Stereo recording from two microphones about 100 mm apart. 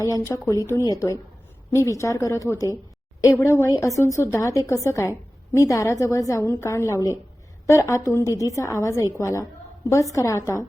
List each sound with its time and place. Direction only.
0.0 s a woman's voice: 30° left (ahead or behind)